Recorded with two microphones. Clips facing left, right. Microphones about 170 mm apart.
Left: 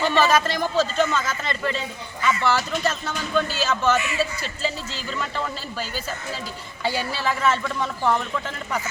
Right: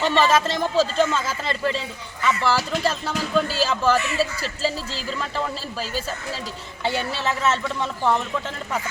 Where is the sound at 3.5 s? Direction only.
30° right (ahead or behind).